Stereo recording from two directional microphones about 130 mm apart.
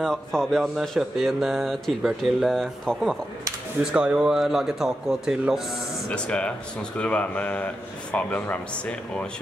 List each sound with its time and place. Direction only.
0.0 s speech: 5° left (ahead or behind)
3.9 s speech: 10° right (ahead or behind)
6.0 s a man's voice: 10° left (ahead or behind)